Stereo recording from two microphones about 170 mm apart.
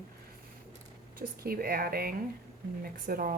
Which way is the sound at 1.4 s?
60° right (ahead or behind).